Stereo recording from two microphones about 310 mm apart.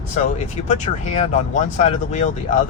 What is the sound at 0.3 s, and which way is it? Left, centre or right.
Speech, left.